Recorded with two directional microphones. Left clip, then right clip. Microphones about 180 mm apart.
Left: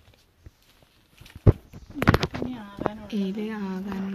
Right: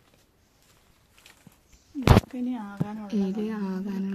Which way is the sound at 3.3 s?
Centre (ahead or behind).